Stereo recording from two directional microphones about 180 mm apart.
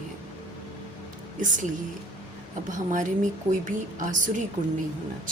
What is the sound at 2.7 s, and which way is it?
A woman's voice, 45° right (ahead or behind).